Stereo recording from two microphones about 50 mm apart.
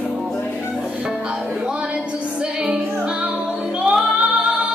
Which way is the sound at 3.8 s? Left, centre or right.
Centre.